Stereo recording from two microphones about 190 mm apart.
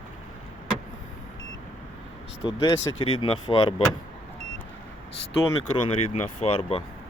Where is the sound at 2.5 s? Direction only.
25° left (ahead or behind).